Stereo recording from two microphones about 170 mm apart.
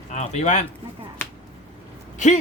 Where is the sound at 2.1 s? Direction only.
45° left (ahead or behind).